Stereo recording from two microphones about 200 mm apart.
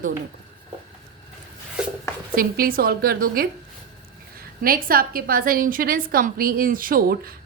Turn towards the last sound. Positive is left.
turn(degrees=-50)  # may be behind; listen again after turning